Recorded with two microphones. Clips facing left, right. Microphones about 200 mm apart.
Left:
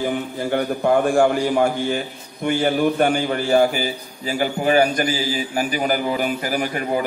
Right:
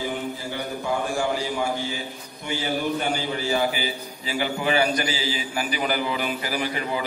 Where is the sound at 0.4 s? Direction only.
55° left (ahead or behind).